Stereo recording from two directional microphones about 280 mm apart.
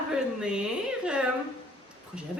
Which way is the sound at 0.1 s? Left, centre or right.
Centre.